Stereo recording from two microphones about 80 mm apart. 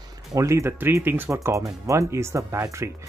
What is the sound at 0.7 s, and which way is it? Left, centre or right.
Speech, right.